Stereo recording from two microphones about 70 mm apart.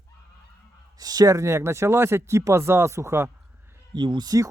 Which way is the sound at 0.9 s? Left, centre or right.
Right.